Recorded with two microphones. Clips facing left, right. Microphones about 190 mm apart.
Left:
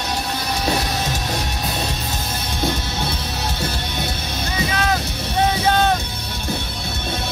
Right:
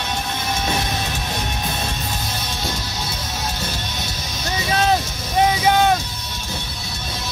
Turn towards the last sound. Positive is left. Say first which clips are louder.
# right 1 dB
turn(degrees=-10)  # may be behind; listen again after turning